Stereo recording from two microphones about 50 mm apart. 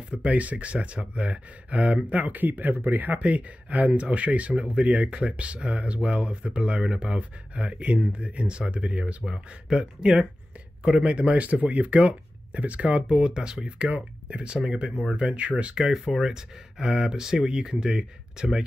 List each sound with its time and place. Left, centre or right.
0.1 s speech: right
13.7 s speech: right
15.5 s speech: centre